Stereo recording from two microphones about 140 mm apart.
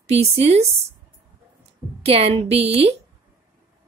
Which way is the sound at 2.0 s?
45° right (ahead or behind).